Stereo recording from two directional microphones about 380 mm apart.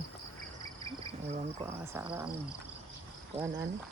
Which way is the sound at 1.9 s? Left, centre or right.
Centre.